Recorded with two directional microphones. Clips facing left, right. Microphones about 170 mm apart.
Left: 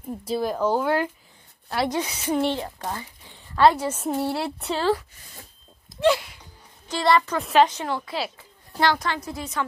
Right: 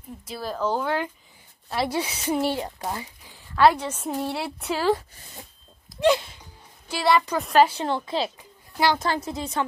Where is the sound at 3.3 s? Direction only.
Centre (ahead or behind).